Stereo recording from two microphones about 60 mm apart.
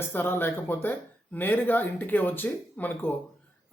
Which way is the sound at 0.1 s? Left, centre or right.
Left.